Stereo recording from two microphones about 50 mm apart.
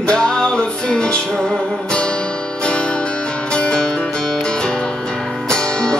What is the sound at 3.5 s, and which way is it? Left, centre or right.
Music, centre.